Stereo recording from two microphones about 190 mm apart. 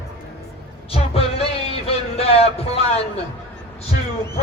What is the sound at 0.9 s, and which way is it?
Music, 30° left (ahead or behind).